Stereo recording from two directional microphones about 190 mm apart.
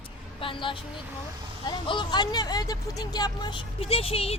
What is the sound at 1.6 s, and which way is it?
Speech, 25° left (ahead or behind).